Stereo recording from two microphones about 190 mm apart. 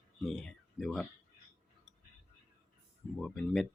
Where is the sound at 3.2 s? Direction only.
Centre (ahead or behind).